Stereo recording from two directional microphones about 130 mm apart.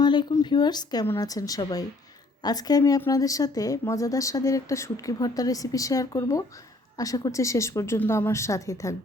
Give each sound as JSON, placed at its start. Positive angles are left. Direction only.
{"t": 0.0, "sound": "speech", "side_deg": 35}